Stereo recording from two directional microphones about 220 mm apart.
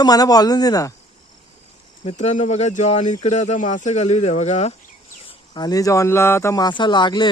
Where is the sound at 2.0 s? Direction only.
30° left (ahead or behind).